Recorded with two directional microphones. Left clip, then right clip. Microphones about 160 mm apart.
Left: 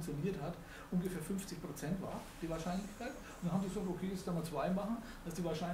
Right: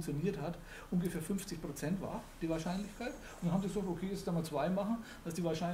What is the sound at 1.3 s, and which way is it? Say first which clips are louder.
Speech: right 3 dB; 50° right (ahead or behind).